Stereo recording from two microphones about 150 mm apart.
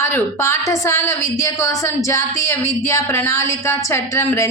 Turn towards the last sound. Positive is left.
turn(degrees=20)  # may be behind; listen again after turning